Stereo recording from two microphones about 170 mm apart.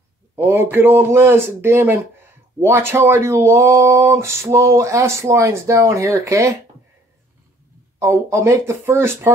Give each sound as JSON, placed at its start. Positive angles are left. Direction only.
{"t": 0.4, "sound": "speech", "side_deg": -10}
{"t": 8.0, "sound": "speech", "side_deg": -15}